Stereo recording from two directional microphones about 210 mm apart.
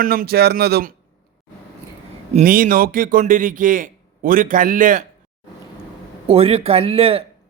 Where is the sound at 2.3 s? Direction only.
40° right (ahead or behind).